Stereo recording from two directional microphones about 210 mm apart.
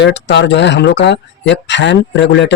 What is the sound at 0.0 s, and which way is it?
Speech, 55° left (ahead or behind).